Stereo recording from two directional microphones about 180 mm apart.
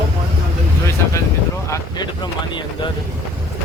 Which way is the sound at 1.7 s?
25° left (ahead or behind).